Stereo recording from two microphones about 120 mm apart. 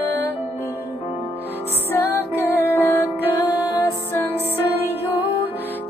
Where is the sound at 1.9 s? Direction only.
15° left (ahead or behind).